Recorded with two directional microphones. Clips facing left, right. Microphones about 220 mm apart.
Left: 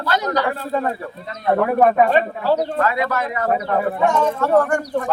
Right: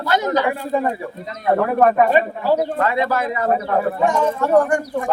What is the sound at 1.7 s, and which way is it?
Speech, 5° left (ahead or behind).